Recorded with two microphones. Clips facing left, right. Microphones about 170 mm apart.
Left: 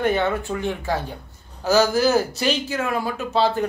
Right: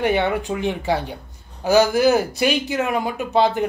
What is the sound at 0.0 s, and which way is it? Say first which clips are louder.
Speech: right 1 dB; 15° right (ahead or behind).